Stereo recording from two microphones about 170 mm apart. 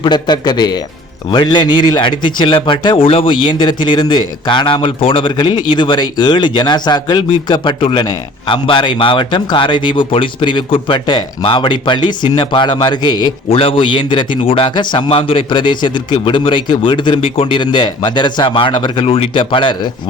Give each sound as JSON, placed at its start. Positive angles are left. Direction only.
{"t": 0.0, "sound": "a man's voice", "side_deg": 25}